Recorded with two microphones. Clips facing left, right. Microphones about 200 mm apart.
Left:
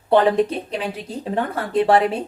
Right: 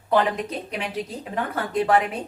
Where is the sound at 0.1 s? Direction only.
30° left (ahead or behind).